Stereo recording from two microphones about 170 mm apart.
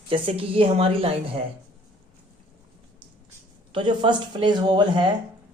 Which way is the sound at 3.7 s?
30° right (ahead or behind).